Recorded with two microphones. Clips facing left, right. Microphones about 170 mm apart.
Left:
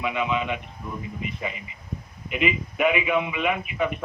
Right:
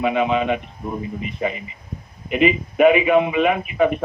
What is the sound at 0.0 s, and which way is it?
Speech, 45° right (ahead or behind).